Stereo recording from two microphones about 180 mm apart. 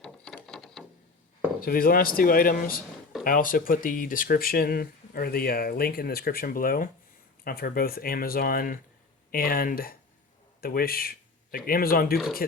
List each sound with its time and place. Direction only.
0.0 s a sound: 5° left (ahead or behind)
1.6 s speech: 55° left (ahead or behind)
12.1 s speech: centre (ahead or behind)